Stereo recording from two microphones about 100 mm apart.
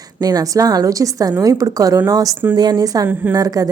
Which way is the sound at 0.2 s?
40° right (ahead or behind).